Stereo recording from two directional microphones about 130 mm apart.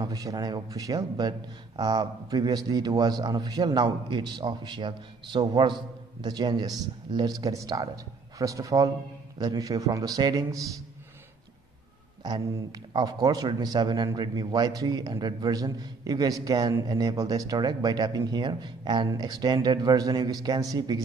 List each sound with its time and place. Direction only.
0.0 s a man's voice: 30° right (ahead or behind)
12.7 s a man's voice: 30° right (ahead or behind)